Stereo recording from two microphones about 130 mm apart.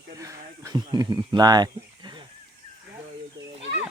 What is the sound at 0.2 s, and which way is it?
Speech, 25° right (ahead or behind).